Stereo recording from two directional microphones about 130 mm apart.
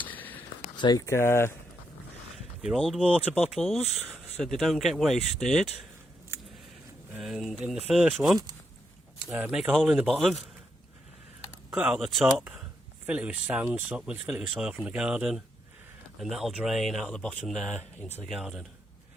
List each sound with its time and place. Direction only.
0.0 s a sound: 15° left (ahead or behind)
0.8 s speech: 30° left (ahead or behind)
2.7 s speech: 5° left (ahead or behind)
3.5 s speech: centre (ahead or behind)
7.2 s speech: centre (ahead or behind)
11.7 s speech: 10° right (ahead or behind)
13.1 s speech: 10° right (ahead or behind)